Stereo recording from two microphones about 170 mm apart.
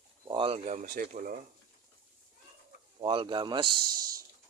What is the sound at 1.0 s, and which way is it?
Speech, 55° right (ahead or behind).